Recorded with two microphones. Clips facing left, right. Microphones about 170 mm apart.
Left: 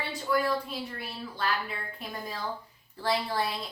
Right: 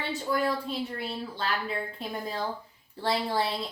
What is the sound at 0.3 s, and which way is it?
Speech, 25° right (ahead or behind).